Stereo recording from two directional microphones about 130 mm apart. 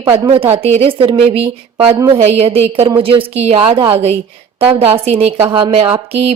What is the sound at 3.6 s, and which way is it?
Speech, 40° right (ahead or behind).